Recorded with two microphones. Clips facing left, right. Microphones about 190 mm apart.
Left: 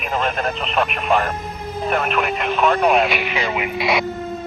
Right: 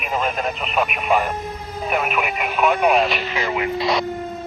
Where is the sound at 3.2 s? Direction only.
15° left (ahead or behind).